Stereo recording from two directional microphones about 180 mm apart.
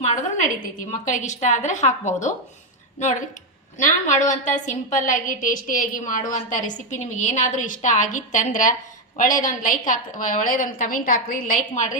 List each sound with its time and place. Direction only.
0.0 s a woman's voice: 40° left (ahead or behind)